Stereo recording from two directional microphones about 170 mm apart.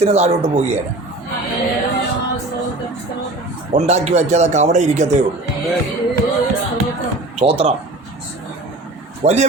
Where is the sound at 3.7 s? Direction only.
40° right (ahead or behind).